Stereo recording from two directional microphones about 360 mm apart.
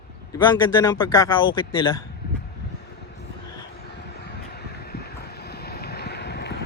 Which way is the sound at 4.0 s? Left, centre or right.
Left.